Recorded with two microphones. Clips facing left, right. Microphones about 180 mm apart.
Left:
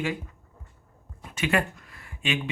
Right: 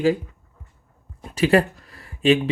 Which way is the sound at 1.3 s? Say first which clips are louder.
Right 9 dB; 35° right (ahead or behind).